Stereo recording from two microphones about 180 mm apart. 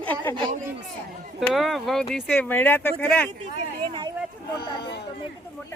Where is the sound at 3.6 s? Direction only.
25° right (ahead or behind).